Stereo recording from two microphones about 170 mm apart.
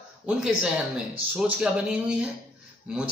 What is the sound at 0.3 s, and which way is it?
A man's voice, 5° right (ahead or behind).